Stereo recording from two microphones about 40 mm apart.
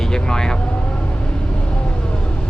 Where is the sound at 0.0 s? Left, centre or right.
Centre.